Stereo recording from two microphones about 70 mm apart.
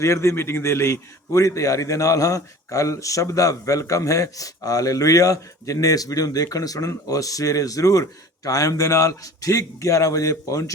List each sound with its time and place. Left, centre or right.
0.0 s a man's voice: left